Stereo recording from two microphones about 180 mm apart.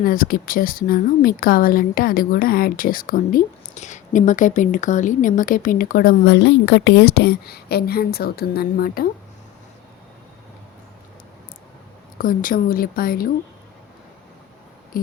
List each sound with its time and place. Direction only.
0.0 s speech: 50° left (ahead or behind)
6.3 s a woman's voice: 75° left (ahead or behind); by 9.0 s 55° left (ahead or behind)
12.1 s speech: 50° left (ahead or behind)
14.9 s a sound: 55° left (ahead or behind)